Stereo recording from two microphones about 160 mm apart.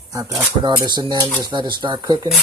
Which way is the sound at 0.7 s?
30° right (ahead or behind).